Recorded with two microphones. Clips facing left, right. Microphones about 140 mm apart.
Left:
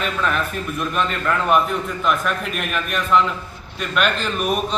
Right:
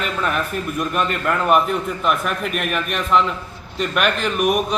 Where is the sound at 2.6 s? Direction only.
5° right (ahead or behind).